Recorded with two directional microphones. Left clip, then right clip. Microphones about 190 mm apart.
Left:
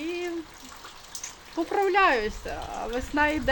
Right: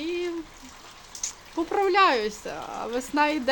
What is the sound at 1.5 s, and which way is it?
Speech, 20° right (ahead or behind).